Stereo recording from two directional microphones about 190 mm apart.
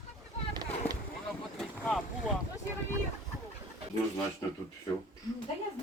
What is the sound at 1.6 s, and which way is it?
Boat, 5° left (ahead or behind).